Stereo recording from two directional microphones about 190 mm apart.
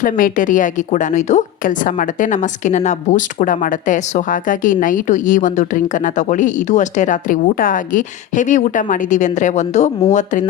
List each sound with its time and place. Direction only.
0.0 s a woman's voice: 45° left (ahead or behind)